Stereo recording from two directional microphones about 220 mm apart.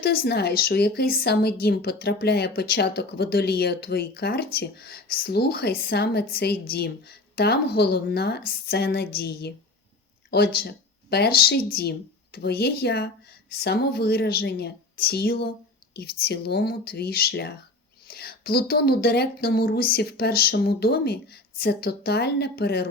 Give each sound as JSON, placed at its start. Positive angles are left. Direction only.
{"t": 0.0, "sound": "a woman's voice", "side_deg": 45}